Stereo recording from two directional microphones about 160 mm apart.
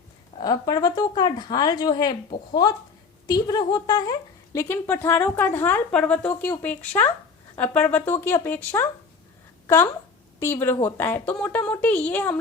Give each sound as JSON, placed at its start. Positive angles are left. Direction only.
{"t": 0.3, "sound": "a woman's voice", "side_deg": 25}